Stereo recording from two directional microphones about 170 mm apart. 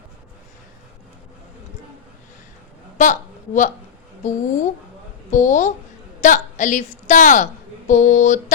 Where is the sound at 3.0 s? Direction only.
50° left (ahead or behind).